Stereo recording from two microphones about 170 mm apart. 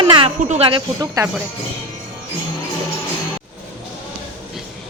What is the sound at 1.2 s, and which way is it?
Speech, 20° right (ahead or behind).